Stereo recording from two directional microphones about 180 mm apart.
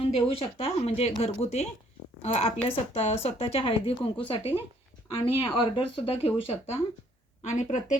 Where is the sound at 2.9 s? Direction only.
35° left (ahead or behind).